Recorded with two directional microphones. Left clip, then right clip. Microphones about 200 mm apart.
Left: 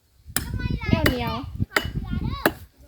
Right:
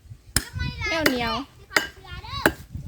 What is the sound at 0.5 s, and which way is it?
Hammer, 55° right (ahead or behind).